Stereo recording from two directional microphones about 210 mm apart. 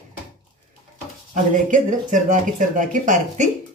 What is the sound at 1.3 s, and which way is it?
Speech, 40° right (ahead or behind).